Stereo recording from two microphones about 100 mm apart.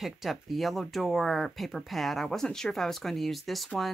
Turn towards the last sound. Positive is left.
turn(degrees=0)  # may be behind; listen again after turning